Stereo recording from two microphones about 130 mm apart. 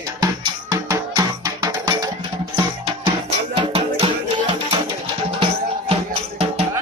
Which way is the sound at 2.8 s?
40° right (ahead or behind).